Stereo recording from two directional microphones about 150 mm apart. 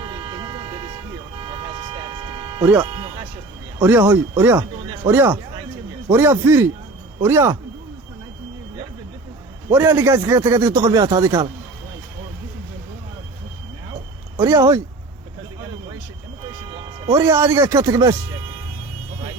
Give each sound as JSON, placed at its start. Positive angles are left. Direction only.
{"t": 0.0, "sound": "vehicle", "side_deg": -30}
{"t": 2.8, "sound": "music", "side_deg": -30}
{"t": 3.8, "sound": "speech", "side_deg": -10}
{"t": 9.7, "sound": "speech", "side_deg": -15}
{"t": 14.3, "sound": "speech", "side_deg": -20}
{"t": 16.7, "sound": "speech", "side_deg": -20}